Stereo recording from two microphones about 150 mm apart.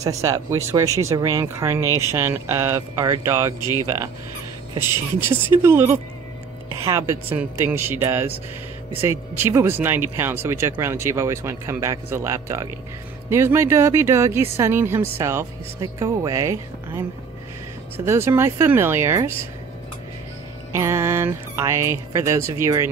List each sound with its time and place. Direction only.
0.0 s speech: 20° right (ahead or behind)
4.7 s speech: 15° right (ahead or behind)
20.7 s speech: 20° right (ahead or behind)